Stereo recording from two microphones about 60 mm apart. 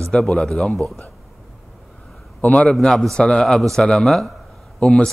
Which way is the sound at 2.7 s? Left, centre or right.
Centre.